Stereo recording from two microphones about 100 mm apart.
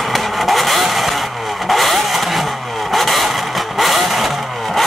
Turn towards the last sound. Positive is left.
turn(degrees=0)  # may be behind; listen again after turning